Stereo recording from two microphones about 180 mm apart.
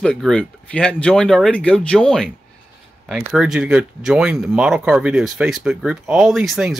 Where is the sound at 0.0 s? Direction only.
5° left (ahead or behind).